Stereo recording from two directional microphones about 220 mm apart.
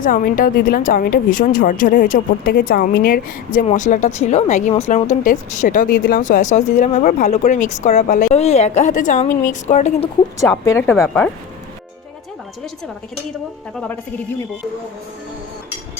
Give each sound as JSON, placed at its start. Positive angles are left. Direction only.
{"t": 0.0, "sound": "a woman's voice", "side_deg": 40}
{"t": 10.7, "sound": "speech", "side_deg": 10}